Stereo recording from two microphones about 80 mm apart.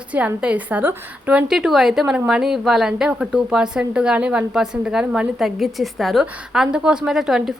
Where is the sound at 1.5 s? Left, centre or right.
Centre.